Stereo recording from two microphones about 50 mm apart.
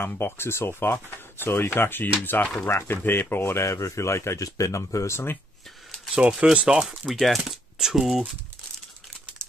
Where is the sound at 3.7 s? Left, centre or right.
Left.